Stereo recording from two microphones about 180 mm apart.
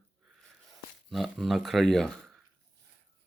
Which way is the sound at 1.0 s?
Centre (ahead or behind).